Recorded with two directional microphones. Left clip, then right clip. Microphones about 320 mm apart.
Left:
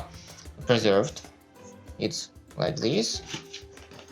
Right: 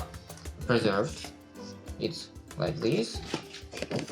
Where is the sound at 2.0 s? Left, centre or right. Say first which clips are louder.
Left 4 dB; left.